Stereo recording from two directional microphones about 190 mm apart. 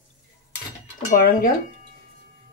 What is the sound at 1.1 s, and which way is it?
Speech, 50° left (ahead or behind).